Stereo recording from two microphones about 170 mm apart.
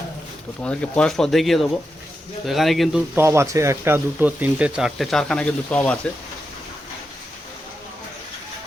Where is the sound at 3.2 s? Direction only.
15° right (ahead or behind); by 6.0 s 5° left (ahead or behind).